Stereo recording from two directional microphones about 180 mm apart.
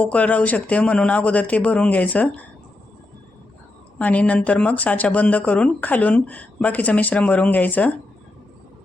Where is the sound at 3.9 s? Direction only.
10° left (ahead or behind).